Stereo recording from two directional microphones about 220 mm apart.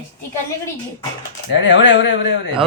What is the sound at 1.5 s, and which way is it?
Speech, 55° left (ahead or behind).